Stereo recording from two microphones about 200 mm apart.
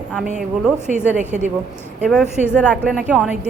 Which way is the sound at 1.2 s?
35° right (ahead or behind).